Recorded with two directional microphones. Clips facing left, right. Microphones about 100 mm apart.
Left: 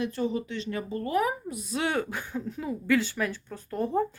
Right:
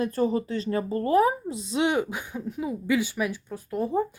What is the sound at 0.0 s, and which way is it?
Speech, 40° right (ahead or behind).